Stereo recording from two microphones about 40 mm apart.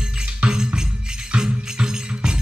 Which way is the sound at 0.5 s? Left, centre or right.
Centre.